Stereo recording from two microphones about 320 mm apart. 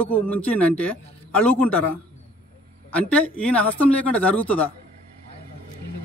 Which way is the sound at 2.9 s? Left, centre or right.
Centre.